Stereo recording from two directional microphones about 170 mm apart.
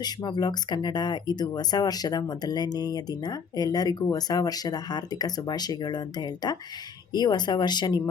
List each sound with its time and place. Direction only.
0.0 s speech: 25° left (ahead or behind)